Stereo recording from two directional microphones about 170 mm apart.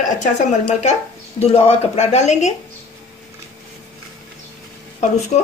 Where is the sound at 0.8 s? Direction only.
40° left (ahead or behind).